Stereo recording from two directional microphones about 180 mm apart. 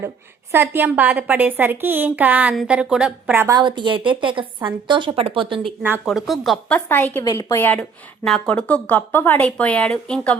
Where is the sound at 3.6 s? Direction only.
25° right (ahead or behind).